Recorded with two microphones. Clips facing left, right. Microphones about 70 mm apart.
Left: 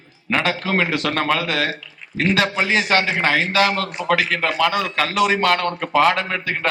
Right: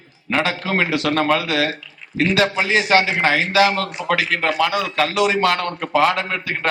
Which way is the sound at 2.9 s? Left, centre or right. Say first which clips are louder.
Right 3 dB; left.